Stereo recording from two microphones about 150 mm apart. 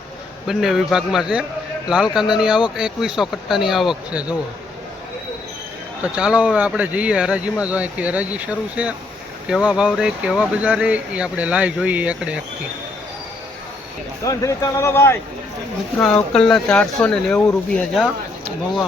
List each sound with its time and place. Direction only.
0.4 s speech: centre (ahead or behind)
6.1 s speech: 5° right (ahead or behind)
14.3 s speech: 20° left (ahead or behind)